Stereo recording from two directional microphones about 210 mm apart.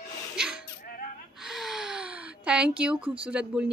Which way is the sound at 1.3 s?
Centre (ahead or behind).